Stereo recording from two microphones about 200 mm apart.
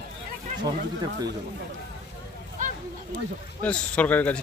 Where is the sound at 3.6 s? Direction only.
5° left (ahead or behind).